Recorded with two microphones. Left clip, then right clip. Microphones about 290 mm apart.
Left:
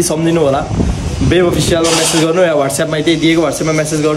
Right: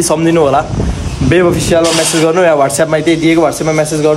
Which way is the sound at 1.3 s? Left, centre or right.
Centre.